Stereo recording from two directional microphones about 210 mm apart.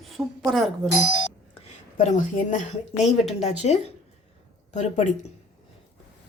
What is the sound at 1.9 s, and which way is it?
A woman's voice, 40° left (ahead or behind).